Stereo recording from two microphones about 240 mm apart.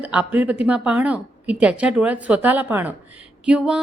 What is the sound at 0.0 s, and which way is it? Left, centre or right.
A woman's voice, centre.